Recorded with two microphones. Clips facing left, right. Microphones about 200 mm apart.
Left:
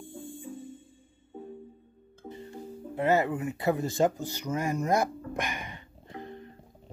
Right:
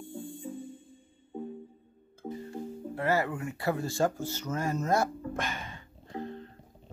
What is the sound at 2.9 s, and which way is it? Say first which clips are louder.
Speech: left 4 dB; 20° left (ahead or behind).